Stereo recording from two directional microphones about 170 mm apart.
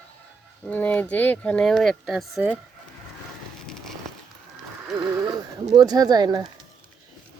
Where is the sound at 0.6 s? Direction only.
10° left (ahead or behind).